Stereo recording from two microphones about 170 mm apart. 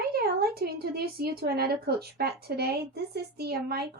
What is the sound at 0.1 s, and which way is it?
A woman's voice, 65° right (ahead or behind).